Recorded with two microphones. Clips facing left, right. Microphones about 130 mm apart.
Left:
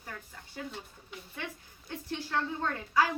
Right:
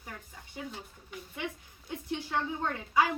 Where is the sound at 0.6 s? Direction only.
5° right (ahead or behind).